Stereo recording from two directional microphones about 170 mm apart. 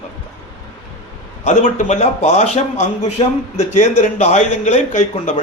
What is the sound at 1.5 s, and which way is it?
A man's voice, 45° left (ahead or behind).